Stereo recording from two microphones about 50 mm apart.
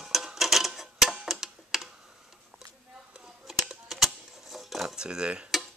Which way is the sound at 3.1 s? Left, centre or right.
Centre.